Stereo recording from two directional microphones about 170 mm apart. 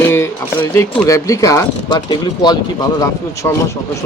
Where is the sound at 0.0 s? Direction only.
15° left (ahead or behind).